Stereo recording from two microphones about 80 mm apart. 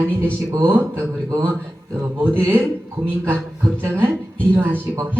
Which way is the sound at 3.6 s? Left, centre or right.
Right.